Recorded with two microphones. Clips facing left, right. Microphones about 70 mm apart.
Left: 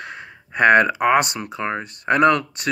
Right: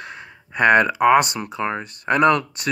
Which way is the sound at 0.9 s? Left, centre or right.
Left.